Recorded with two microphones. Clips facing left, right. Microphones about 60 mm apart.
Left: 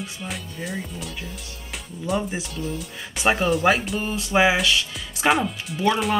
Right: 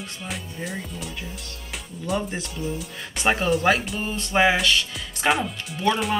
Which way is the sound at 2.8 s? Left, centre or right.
Centre.